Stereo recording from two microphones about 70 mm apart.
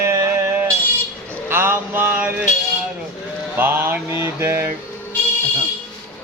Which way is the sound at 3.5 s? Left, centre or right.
Right.